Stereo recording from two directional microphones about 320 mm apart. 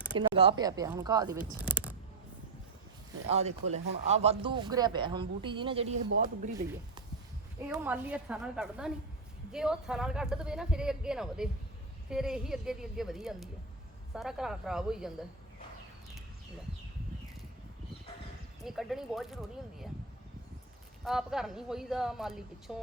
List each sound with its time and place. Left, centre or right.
0.0 s speech: centre
3.2 s speech: centre
6.5 s speech: centre
18.6 s speech: centre
21.0 s speech: centre